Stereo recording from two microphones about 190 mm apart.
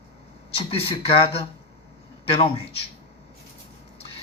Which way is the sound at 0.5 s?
30° left (ahead or behind).